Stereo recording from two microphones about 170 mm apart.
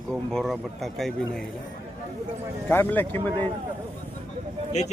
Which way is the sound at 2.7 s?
10° left (ahead or behind).